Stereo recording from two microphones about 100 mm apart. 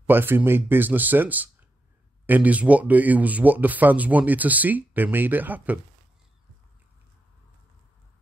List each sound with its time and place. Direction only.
0.0 s speech: 20° right (ahead or behind)